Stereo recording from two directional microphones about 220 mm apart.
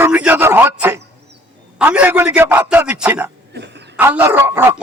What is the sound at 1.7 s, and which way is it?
A man's voice, 5° right (ahead or behind).